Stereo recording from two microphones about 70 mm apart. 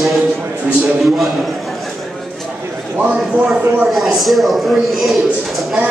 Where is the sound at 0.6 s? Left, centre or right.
Right.